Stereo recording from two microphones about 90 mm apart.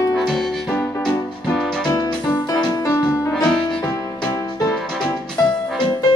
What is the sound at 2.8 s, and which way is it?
Music, 35° left (ahead or behind).